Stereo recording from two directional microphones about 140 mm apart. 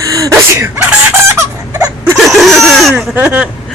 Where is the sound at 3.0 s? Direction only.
10° right (ahead or behind).